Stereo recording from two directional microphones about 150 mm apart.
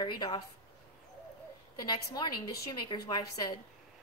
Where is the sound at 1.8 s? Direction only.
25° left (ahead or behind).